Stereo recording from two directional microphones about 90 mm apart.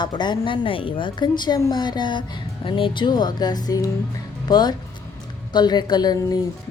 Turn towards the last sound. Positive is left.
turn(degrees=40)  # may be behind; listen again after turning